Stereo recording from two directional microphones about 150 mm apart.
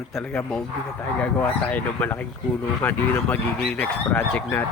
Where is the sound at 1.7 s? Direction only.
10° left (ahead or behind).